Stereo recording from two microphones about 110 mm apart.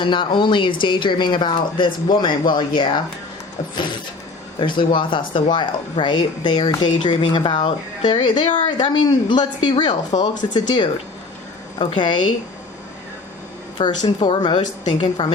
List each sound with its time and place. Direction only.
0.0 s speech: 45° left (ahead or behind)
4.6 s speech: 45° left (ahead or behind)
13.7 s speech: 45° left (ahead or behind)